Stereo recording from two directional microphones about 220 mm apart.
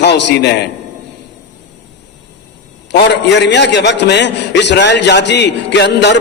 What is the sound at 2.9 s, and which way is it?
A man's voice, 50° left (ahead or behind).